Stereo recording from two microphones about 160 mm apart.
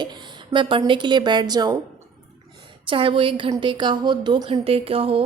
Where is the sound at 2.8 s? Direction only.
35° right (ahead or behind).